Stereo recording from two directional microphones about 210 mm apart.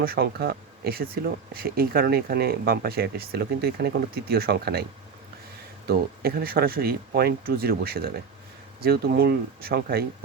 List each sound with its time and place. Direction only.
0.0 s speech: 45° right (ahead or behind)
5.9 s speech: 45° right (ahead or behind)